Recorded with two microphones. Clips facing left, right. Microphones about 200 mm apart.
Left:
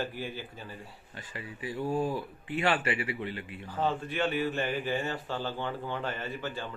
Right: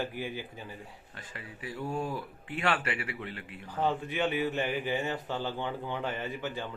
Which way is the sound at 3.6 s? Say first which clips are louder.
Right 1 dB; 15° right (ahead or behind).